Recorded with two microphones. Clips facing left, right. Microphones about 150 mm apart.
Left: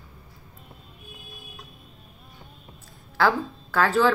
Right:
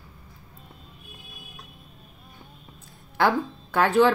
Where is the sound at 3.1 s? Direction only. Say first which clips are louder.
Even; 15° right (ahead or behind).